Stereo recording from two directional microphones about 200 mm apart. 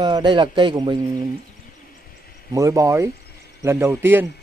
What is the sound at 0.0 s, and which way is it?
Speech, 20° right (ahead or behind).